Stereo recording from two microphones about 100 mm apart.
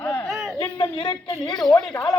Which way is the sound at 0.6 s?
50° left (ahead or behind).